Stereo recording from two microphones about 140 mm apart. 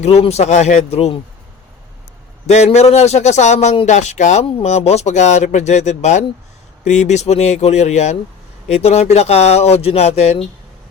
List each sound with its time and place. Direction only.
0.0 s speech: 50° left (ahead or behind)
2.5 s speech: 55° left (ahead or behind)